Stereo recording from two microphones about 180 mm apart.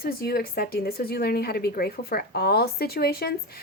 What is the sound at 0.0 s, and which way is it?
A woman's voice, 55° left (ahead or behind).